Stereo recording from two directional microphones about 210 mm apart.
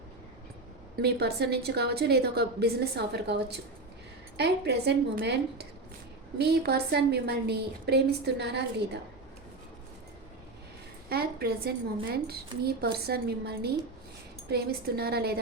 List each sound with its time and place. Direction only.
1.0 s a woman's voice: 50° right (ahead or behind)
11.1 s a sound: 50° right (ahead or behind)
12.1 s a woman's voice: 50° right (ahead or behind)